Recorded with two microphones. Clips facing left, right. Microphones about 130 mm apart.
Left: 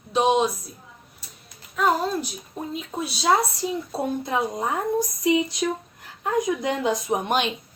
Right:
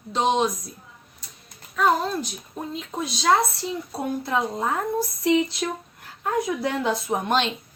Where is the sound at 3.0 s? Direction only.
10° left (ahead or behind).